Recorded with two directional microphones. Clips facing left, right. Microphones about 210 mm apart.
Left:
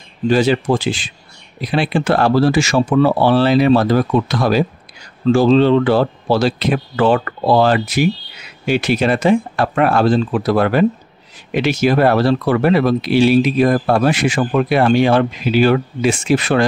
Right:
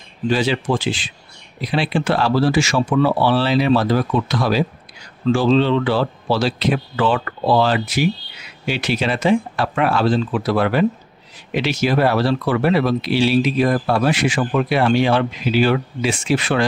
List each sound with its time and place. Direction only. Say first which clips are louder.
0.3 s speech: left 5 dB; 45° left (ahead or behind)